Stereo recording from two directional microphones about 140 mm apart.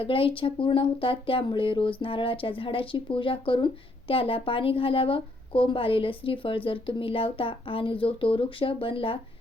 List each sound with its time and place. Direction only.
0.0 s speech: 40° left (ahead or behind)